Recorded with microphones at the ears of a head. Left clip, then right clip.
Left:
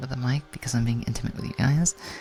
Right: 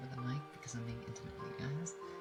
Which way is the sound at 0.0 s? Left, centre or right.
Left.